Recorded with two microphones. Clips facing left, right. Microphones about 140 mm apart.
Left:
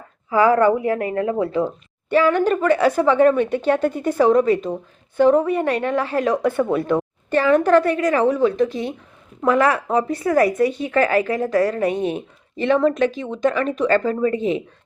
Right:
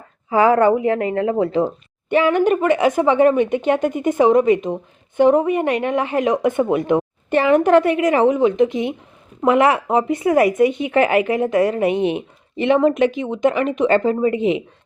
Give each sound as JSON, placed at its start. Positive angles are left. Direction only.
{"t": 0.3, "sound": "speech", "side_deg": -20}